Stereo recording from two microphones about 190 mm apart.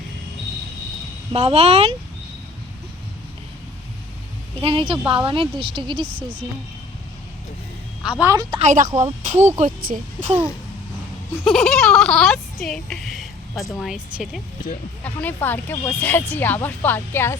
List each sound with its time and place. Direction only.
1.3 s speech: 30° right (ahead or behind)
4.6 s a woman's voice: 30° right (ahead or behind)
8.2 s a woman's voice: 20° right (ahead or behind)
8.5 s speech: 40° right (ahead or behind)
11.5 s a sound: 5° left (ahead or behind)
12.6 s a woman's voice: centre (ahead or behind)
13.7 s a sound: centre (ahead or behind)
15.0 s a woman's voice: 10° left (ahead or behind)